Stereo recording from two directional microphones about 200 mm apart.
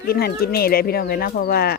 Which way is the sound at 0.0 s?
50° left (ahead or behind).